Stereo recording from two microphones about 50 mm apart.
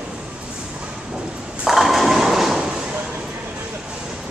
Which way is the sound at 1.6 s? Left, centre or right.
Centre.